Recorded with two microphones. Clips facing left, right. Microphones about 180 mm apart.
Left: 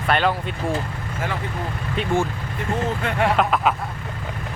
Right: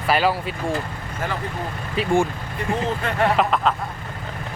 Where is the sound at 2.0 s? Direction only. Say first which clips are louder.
Right 2 dB; 5° right (ahead or behind).